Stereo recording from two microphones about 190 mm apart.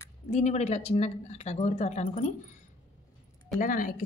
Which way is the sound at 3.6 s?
45° left (ahead or behind).